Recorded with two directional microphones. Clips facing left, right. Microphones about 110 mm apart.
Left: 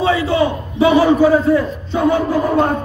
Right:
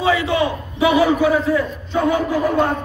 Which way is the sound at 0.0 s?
30° left (ahead or behind).